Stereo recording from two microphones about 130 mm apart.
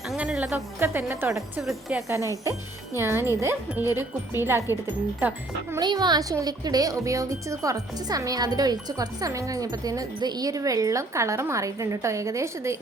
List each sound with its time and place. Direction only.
0.1 s speech: 5° right (ahead or behind)
1.6 s speech: 5° right (ahead or behind)
2.4 s speech: 20° right (ahead or behind)
5.8 s speech: 35° right (ahead or behind)